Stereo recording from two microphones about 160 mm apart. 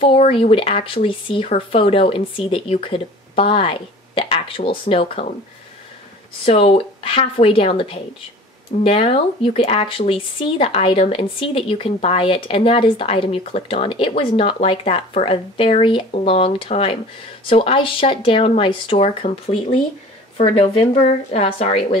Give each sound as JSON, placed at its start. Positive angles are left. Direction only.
{"t": 0.0, "sound": "speech", "side_deg": 35}
{"t": 6.4, "sound": "speech", "side_deg": 40}